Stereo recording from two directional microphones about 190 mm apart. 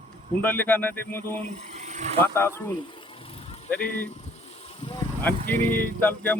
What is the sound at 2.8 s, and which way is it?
Vehicle, 25° left (ahead or behind).